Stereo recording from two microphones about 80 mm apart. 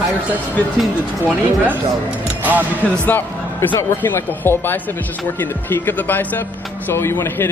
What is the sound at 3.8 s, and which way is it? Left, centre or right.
A man's voice, left.